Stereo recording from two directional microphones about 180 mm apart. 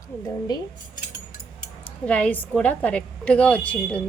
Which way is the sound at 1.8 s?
5° left (ahead or behind).